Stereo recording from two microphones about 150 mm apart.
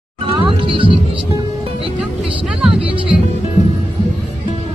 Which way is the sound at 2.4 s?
5° right (ahead or behind).